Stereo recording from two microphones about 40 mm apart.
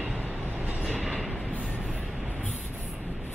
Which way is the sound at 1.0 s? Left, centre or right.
Centre.